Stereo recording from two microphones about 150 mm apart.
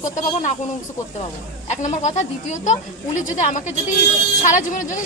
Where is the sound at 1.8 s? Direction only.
50° left (ahead or behind).